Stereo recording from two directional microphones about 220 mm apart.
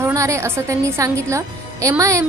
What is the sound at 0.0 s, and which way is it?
A woman's voice, 15° right (ahead or behind).